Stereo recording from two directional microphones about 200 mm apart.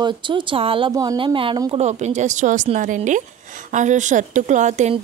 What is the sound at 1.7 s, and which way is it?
Speech, 35° right (ahead or behind).